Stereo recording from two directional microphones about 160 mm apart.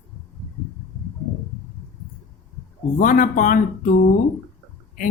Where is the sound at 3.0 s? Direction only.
55° left (ahead or behind).